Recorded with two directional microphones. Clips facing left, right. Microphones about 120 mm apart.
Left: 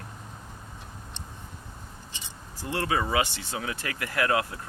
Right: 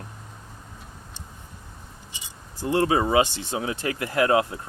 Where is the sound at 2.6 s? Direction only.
25° right (ahead or behind).